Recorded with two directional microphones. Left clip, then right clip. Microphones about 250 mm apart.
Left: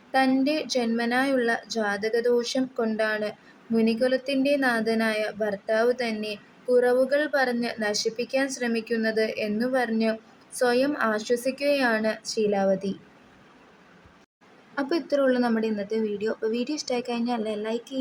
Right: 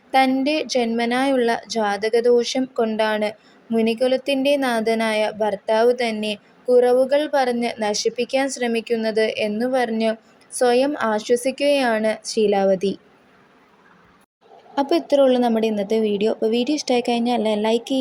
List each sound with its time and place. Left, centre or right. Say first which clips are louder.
0.1 s speech: right 5 dB; centre
14.8 s speech: right 8 dB; centre